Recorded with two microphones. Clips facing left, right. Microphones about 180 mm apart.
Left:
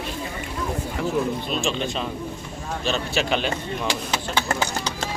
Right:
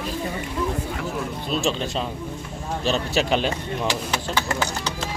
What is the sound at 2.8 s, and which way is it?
Speech, 35° right (ahead or behind).